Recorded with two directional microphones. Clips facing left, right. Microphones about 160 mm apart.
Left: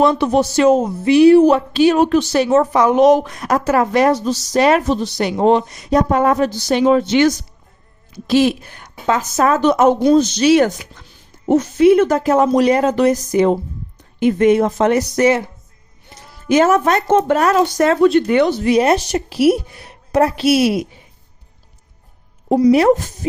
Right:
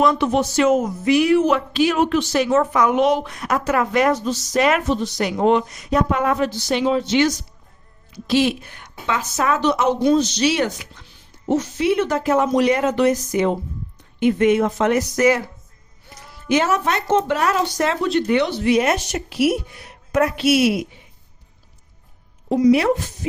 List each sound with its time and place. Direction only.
0.0 s a woman's voice: 35° left (ahead or behind)
16.5 s speech: 45° left (ahead or behind)
22.4 s speech: 35° left (ahead or behind)